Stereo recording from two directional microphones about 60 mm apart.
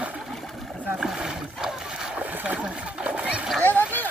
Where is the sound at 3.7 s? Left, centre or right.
Left.